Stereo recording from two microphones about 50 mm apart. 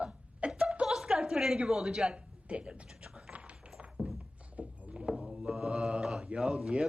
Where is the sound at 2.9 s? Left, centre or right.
Centre.